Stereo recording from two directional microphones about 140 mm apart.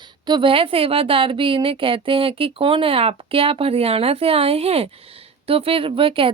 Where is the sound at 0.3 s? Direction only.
35° right (ahead or behind).